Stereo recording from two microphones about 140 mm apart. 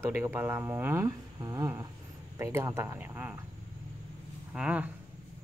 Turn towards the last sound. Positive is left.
turn(degrees=-10)  # may be behind; listen again after turning